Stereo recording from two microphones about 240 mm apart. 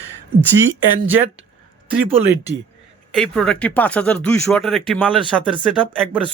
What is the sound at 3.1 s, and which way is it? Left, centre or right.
Speech, centre.